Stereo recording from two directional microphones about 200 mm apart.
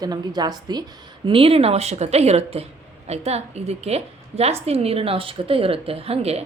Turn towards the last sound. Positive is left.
turn(degrees=-30)  # may be behind; listen again after turning